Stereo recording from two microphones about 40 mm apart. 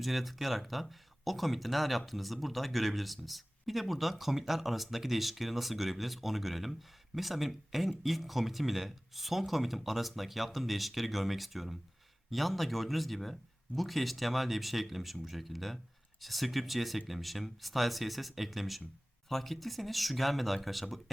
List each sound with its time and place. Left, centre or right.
0.0 s speech: centre